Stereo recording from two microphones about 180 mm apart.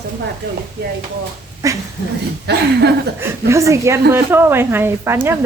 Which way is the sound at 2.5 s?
65° right (ahead or behind).